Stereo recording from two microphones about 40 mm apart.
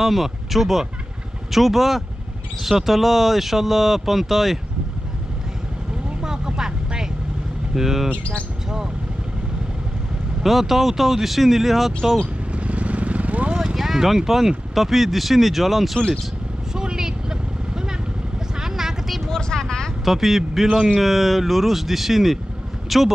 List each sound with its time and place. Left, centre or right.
0.0 s speech: centre
6.2 s vehicle: centre
7.7 s speech: centre
8.1 s speech: left
10.4 s speech: centre
12.5 s vehicle: right
13.7 s speech: centre
16.7 s vehicle: centre
19.3 s vehicle: centre
20.1 s a man's voice: centre
21.0 s speech: centre